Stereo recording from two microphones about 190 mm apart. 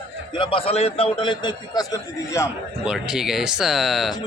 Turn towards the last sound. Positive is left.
turn(degrees=0)  # may be behind; listen again after turning